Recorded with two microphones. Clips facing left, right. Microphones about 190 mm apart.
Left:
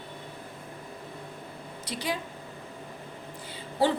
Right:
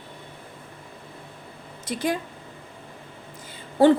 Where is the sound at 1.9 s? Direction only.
50° right (ahead or behind).